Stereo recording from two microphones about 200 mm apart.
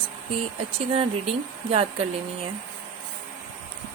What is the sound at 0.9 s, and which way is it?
Speech, 30° right (ahead or behind).